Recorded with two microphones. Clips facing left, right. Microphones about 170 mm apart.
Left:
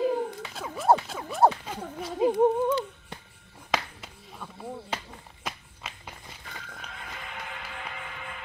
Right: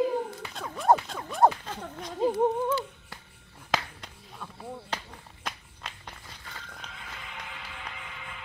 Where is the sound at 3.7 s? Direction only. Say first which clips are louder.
Even; 5° left (ahead or behind).